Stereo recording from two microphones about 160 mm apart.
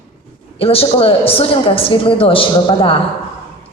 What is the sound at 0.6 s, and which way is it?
A woman's voice, 35° left (ahead or behind).